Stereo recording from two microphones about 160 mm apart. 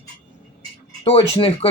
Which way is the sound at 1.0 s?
35° left (ahead or behind).